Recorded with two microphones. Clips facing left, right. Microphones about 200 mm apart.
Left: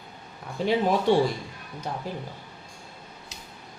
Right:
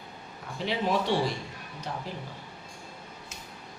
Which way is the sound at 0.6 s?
50° left (ahead or behind).